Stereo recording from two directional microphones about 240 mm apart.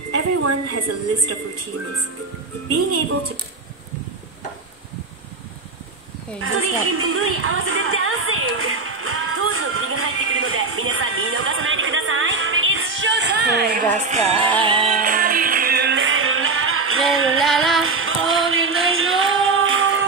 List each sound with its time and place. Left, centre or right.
0.1 s a woman's voice: right
6.4 s music: right
13.9 s music: right
17.4 s female singing: centre
17.8 s music: right